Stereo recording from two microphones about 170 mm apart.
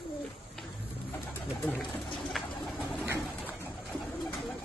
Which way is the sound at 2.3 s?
Centre (ahead or behind).